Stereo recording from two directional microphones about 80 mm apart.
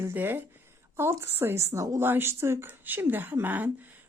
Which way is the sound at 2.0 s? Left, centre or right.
Right.